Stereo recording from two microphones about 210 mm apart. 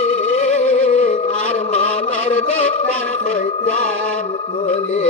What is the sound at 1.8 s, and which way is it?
Chant, 30° left (ahead or behind).